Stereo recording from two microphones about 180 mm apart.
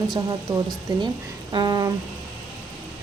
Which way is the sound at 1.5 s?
25° right (ahead or behind).